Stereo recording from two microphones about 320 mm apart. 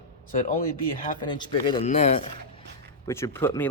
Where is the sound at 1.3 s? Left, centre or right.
Centre.